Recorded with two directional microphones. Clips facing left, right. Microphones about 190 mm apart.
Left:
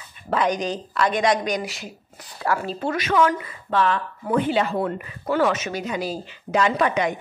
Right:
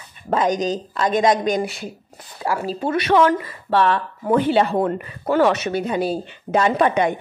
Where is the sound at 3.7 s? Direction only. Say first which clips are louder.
Right 3 dB; 60° right (ahead or behind).